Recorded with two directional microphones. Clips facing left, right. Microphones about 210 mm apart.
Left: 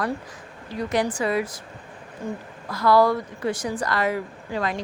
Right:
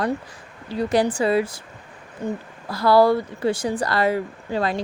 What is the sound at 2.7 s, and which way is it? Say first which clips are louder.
Speech: right 3 dB; 30° right (ahead or behind).